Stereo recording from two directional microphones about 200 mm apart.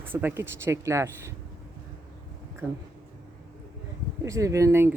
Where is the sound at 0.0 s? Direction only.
10° right (ahead or behind).